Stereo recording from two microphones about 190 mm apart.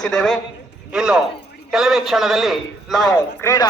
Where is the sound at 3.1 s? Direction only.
20° left (ahead or behind).